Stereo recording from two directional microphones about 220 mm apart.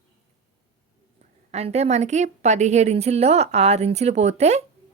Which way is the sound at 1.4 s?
30° right (ahead or behind).